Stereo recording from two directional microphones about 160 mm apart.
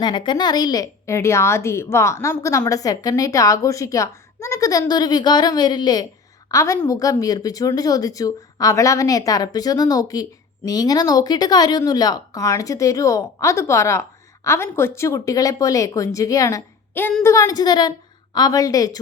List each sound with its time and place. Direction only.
0.0 s a woman's voice: 30° left (ahead or behind)